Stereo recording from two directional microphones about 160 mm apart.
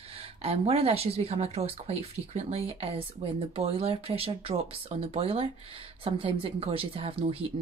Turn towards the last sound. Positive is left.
turn(degrees=-35)  # may be behind; listen again after turning